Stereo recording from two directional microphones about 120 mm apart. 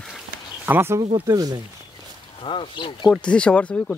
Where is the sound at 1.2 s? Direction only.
30° right (ahead or behind).